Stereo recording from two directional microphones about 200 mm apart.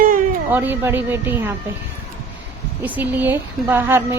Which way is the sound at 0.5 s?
10° right (ahead or behind).